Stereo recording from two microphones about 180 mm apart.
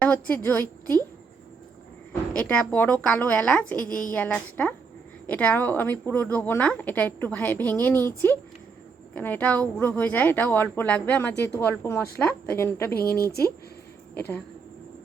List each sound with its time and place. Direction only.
0.0 s a woman's voice: 10° left (ahead or behind)
2.3 s a woman's voice: 5° left (ahead or behind)
12.9 s speech: 60° left (ahead or behind)
14.2 s a woman's voice: 10° left (ahead or behind)